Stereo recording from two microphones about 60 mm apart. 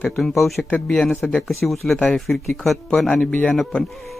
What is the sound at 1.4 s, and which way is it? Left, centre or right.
A man's voice, centre.